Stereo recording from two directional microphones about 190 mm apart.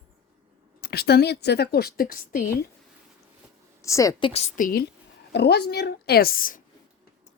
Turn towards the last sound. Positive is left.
turn(degrees=45)  # may be behind; listen again after turning